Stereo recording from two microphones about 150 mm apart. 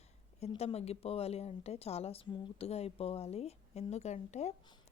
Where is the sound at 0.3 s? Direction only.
45° left (ahead or behind).